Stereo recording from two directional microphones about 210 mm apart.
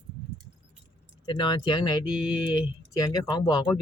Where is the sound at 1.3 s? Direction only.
20° left (ahead or behind).